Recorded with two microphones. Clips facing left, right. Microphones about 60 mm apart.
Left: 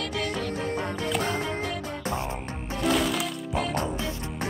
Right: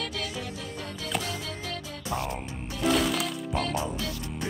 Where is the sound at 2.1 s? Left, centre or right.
Left.